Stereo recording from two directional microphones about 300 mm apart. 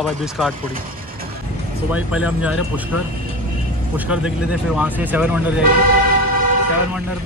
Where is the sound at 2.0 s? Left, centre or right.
Centre.